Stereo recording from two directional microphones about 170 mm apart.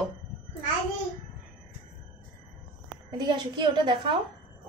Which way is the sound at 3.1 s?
25° right (ahead or behind).